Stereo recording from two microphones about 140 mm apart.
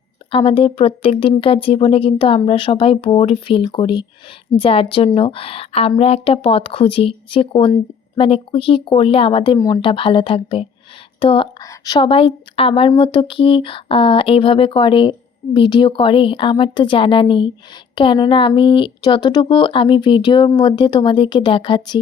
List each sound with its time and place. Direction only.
0.3 s a woman's voice: 40° left (ahead or behind)